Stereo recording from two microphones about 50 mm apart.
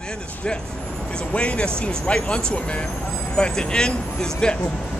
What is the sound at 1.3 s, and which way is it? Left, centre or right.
Speech, left.